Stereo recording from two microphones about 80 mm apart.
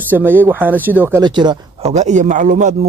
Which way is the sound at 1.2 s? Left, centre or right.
Right.